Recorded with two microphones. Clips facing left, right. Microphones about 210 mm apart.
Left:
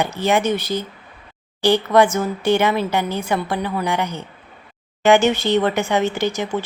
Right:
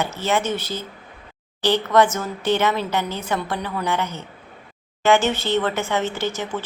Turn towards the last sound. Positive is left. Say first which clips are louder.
# left 4 dB
turn(degrees=15)  # may be behind; listen again after turning